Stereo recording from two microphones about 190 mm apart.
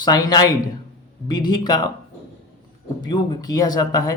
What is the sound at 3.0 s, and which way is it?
Speech, 20° left (ahead or behind).